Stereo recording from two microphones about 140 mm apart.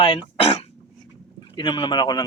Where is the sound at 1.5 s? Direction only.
30° left (ahead or behind).